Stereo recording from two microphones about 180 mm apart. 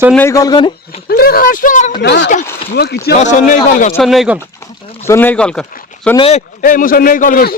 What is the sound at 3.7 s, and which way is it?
Speech, 55° left (ahead or behind).